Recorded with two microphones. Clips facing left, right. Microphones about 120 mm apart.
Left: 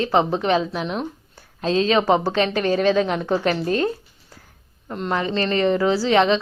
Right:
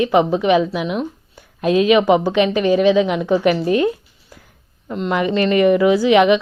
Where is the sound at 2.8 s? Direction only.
45° left (ahead or behind).